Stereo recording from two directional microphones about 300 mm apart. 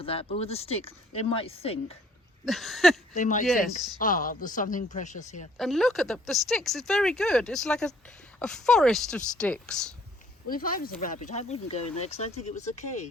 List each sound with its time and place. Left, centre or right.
0.0 s speech: centre
2.4 s speech: centre
3.2 s speech: left
5.5 s speech: centre
10.5 s speech: left